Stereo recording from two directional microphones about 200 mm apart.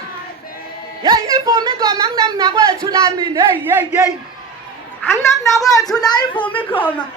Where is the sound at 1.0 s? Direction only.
20° right (ahead or behind).